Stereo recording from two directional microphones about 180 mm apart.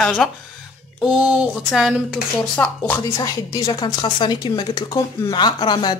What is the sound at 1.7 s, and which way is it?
Speech, centre (ahead or behind).